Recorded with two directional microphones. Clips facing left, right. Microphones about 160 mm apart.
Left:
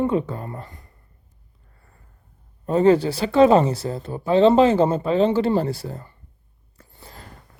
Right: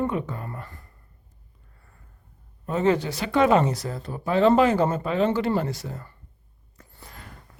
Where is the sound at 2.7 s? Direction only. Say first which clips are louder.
Left 6 dB; 35° left (ahead or behind).